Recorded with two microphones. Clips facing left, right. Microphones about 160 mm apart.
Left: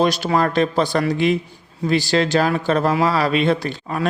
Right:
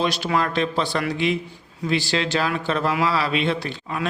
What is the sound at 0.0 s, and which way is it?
Speech, 45° left (ahead or behind).